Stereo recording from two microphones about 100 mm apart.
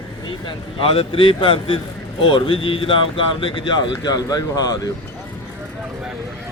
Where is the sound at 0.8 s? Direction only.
65° left (ahead or behind); by 4.8 s 40° left (ahead or behind).